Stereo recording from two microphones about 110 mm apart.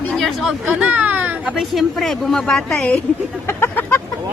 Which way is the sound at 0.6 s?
10° right (ahead or behind).